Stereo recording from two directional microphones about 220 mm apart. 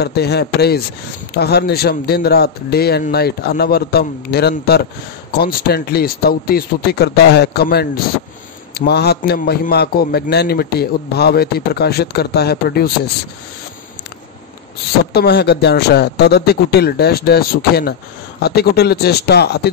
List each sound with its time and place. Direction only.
0.0 s a man's voice: 45° left (ahead or behind)
15.1 s a man's voice: 50° left (ahead or behind)